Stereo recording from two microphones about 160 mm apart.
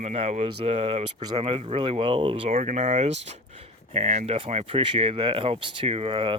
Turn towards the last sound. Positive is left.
turn(degrees=-35)  # may be behind; listen again after turning